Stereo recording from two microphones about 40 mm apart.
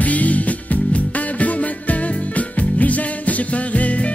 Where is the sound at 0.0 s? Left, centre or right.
Left.